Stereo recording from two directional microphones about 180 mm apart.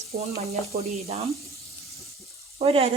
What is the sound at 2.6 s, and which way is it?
Speech, 30° right (ahead or behind).